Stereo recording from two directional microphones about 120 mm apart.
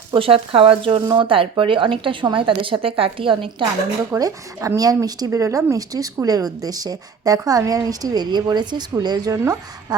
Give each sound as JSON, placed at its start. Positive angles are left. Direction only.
{"t": 0.1, "sound": "a woman's voice", "side_deg": -50}
{"t": 4.2, "sound": "speech", "side_deg": -30}